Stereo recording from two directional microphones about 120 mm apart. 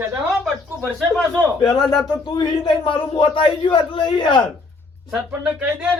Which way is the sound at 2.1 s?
35° left (ahead or behind).